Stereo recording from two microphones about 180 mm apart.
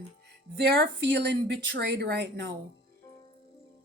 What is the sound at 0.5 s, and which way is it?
Speech, 70° right (ahead or behind).